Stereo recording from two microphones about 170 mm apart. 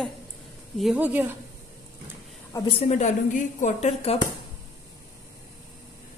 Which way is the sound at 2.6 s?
35° left (ahead or behind).